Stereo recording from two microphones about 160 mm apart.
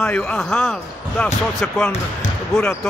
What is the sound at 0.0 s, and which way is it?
Speech, 10° left (ahead or behind).